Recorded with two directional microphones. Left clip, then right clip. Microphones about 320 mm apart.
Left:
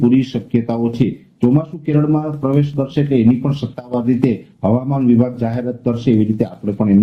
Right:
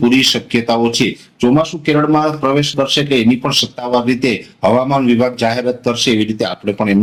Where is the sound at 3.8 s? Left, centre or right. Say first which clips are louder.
Right 3 dB; right.